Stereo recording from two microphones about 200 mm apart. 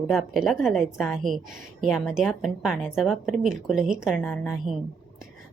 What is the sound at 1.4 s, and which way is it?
Speech, 45° right (ahead or behind).